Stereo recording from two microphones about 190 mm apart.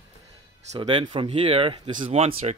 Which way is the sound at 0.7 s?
25° right (ahead or behind).